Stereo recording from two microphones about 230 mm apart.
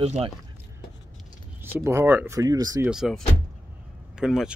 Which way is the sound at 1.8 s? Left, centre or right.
Centre.